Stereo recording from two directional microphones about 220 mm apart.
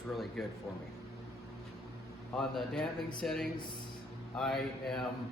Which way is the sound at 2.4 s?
Centre (ahead or behind).